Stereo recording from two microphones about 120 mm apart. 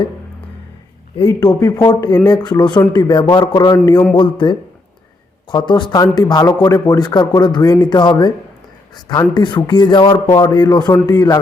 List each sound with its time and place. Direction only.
1.2 s speech: 35° left (ahead or behind)